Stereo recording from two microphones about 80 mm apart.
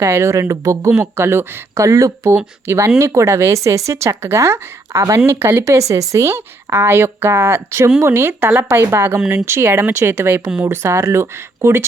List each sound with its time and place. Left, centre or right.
0.0 s speech: right